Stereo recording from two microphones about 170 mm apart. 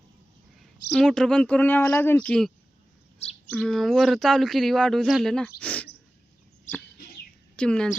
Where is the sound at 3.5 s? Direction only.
5° left (ahead or behind).